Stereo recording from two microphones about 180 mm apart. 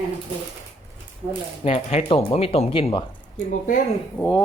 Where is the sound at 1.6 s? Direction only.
35° left (ahead or behind).